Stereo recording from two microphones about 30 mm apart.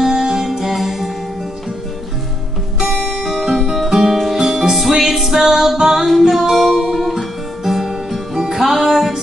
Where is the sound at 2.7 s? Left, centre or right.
Centre.